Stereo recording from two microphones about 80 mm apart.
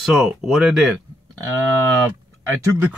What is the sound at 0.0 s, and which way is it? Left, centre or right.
Speech, centre.